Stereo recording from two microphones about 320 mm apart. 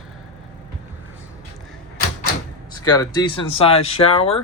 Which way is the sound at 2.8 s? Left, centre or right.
Centre.